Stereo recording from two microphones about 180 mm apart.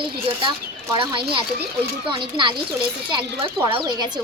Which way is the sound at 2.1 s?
25° right (ahead or behind).